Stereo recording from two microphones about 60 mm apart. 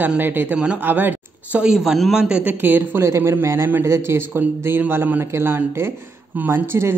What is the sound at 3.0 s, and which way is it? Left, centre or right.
Speech, right.